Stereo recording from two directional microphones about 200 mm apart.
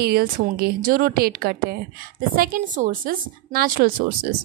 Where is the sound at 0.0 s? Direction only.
50° right (ahead or behind).